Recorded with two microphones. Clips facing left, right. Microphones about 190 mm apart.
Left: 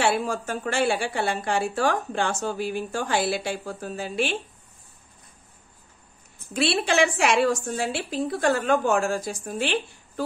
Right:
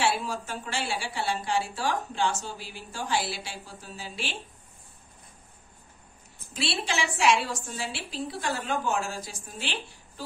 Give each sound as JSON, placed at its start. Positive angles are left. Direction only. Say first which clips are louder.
{"t": 0.2, "sound": "a woman's voice", "louder": "left 6 dB", "side_deg": 50}
{"t": 6.5, "sound": "a woman's voice", "louder": "left 8 dB", "side_deg": 55}